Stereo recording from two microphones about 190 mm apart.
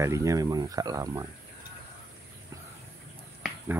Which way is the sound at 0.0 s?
15° right (ahead or behind).